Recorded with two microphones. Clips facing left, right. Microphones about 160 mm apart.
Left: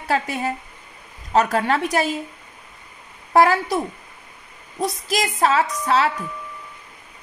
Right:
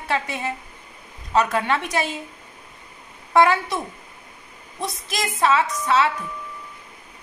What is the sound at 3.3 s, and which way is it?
Speech, 35° left (ahead or behind).